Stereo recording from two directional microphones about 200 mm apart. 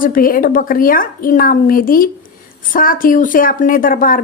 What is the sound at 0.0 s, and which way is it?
Speech, 45° left (ahead or behind).